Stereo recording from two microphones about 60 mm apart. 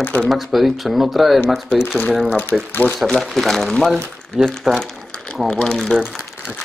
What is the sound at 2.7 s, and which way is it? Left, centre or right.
Speech, left.